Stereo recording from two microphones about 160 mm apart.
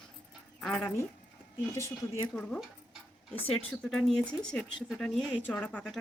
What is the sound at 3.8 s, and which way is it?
Speech, 5° left (ahead or behind).